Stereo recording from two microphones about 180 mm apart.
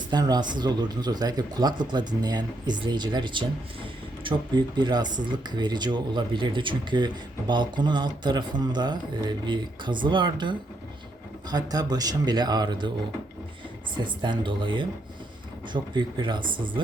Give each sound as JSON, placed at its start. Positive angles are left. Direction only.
{"t": 0.1, "sound": "speech", "side_deg": -20}
{"t": 13.9, "sound": "speech", "side_deg": -25}